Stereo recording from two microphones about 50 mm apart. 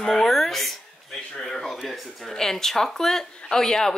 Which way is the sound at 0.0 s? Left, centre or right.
Centre.